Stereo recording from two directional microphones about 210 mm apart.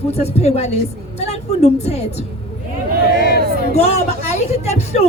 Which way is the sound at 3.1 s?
50° left (ahead or behind).